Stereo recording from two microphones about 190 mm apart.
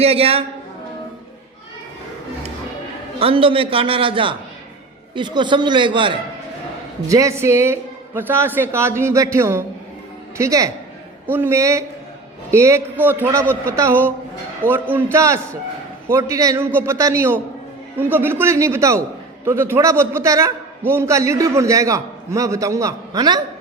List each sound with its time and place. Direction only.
0.0 s a woman's voice: 30° right (ahead or behind)
3.2 s a man's voice: 30° right (ahead or behind)